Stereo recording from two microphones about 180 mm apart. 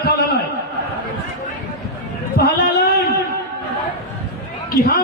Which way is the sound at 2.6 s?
55° left (ahead or behind).